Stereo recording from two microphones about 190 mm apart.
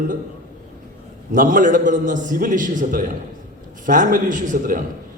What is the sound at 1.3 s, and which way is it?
A man's voice, 45° right (ahead or behind).